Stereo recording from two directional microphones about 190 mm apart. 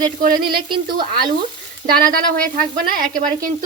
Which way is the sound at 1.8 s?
50° right (ahead or behind).